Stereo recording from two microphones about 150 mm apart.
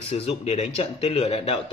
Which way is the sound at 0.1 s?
45° left (ahead or behind).